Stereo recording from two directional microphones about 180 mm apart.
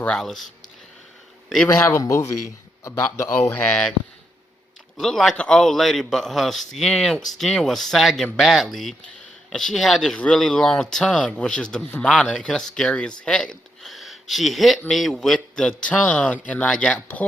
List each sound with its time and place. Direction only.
0.0 s speech: 5° left (ahead or behind)
1.6 s speech: 15° left (ahead or behind)
4.9 s speech: centre (ahead or behind)